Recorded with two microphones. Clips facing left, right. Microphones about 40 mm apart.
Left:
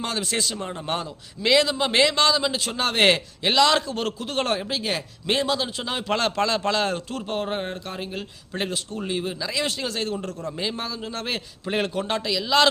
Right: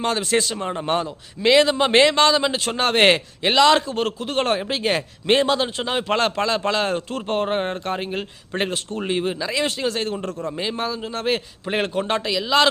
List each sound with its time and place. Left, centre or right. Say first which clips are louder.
0.0 s a man's voice: right 6 dB; right
9.1 s a man's voice: right 4 dB; right
10.5 s a man's voice: right 4 dB; centre